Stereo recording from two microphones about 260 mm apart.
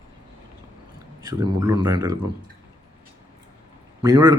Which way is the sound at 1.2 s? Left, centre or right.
Centre.